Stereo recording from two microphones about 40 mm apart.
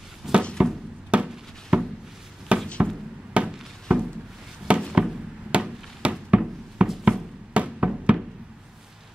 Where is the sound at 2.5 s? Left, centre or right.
Right.